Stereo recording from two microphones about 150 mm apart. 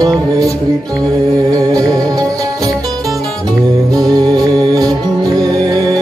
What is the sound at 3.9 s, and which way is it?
Music, 25° right (ahead or behind).